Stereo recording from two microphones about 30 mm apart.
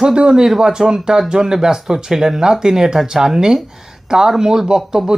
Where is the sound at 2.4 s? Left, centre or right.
Right.